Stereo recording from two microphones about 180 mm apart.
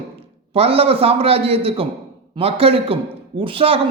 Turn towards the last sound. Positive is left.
turn(degrees=-30)  # may be behind; listen again after turning